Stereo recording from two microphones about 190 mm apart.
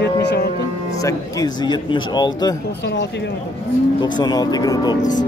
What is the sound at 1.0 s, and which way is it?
A man's voice, 20° left (ahead or behind).